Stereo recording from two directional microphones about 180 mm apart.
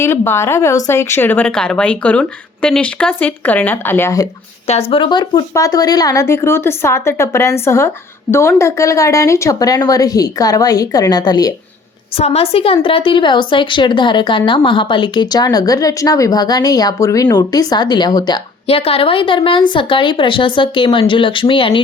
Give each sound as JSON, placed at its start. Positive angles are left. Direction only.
{"t": 0.0, "sound": "speech", "side_deg": 15}
{"t": 4.6, "sound": "a woman's voice", "side_deg": 35}
{"t": 12.1, "sound": "a woman's voice", "side_deg": 35}